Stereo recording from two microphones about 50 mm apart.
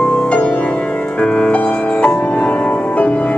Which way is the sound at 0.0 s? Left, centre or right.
Left.